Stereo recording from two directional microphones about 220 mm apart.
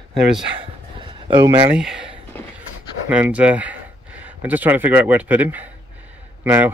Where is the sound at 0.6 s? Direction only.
20° right (ahead or behind).